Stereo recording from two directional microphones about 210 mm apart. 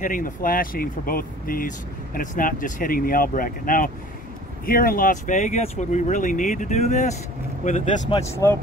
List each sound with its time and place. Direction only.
0.0 s speech: 40° left (ahead or behind)
8.4 s speech: 15° left (ahead or behind)